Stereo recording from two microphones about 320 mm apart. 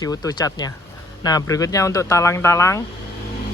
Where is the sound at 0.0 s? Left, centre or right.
Centre.